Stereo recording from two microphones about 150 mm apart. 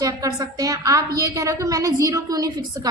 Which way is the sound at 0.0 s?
25° right (ahead or behind).